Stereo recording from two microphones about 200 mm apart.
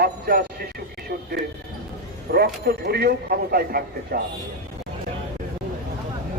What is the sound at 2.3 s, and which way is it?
Speech, 50° right (ahead or behind).